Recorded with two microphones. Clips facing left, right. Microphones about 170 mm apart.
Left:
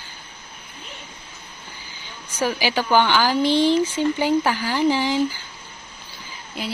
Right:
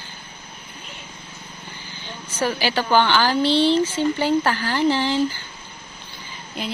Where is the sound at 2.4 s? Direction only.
10° left (ahead or behind).